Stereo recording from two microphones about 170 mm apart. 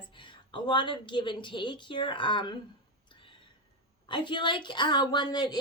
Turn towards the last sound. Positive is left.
turn(degrees=25)  # may be behind; listen again after turning